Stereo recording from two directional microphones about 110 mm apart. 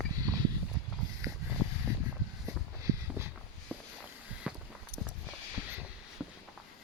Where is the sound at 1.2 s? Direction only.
30° right (ahead or behind).